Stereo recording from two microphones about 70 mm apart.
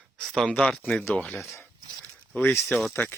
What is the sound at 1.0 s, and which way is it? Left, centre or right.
Speech, left.